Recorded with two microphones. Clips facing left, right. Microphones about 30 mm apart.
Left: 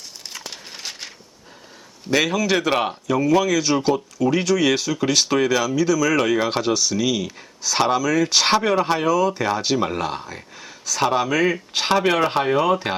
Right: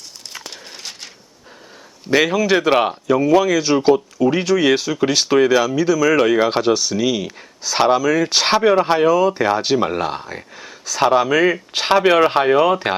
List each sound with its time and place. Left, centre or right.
0.4 s dog: centre
2.0 s speech: centre